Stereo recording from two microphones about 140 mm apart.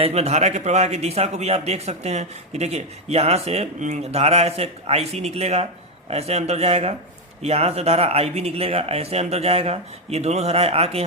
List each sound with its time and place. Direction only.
0.0 s a man's voice: 50° right (ahead or behind)